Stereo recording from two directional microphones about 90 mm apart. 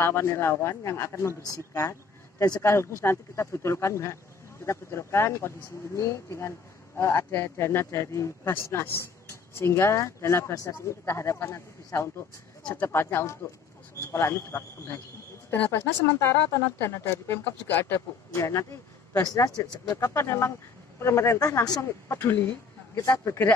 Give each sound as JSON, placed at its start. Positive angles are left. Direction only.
{"t": 0.0, "sound": "a woman's voice", "side_deg": 30}
{"t": 20.2, "sound": "a woman's voice", "side_deg": 30}